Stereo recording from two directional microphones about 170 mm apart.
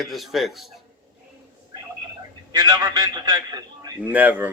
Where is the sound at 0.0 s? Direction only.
Centre (ahead or behind).